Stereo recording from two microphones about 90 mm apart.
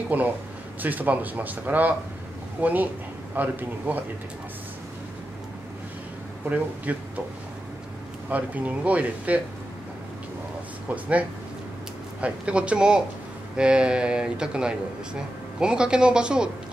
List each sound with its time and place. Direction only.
0.1 s speech: 20° right (ahead or behind)
6.5 s speech: 15° right (ahead or behind)
8.3 s speech: 15° right (ahead or behind)
12.2 s speech: 15° right (ahead or behind)